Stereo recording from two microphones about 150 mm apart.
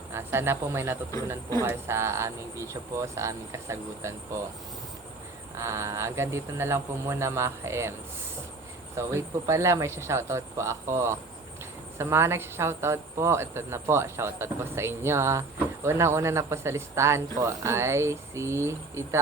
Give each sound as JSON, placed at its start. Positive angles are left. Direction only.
{"t": 0.1, "sound": "speech", "side_deg": -15}
{"t": 5.5, "sound": "speech", "side_deg": -20}
{"t": 9.0, "sound": "speech", "side_deg": -20}